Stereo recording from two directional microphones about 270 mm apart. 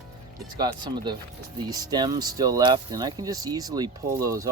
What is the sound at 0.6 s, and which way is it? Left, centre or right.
Speech, centre.